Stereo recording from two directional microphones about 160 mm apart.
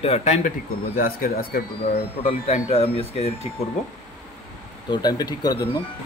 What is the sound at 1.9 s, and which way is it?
A man's voice, 40° left (ahead or behind).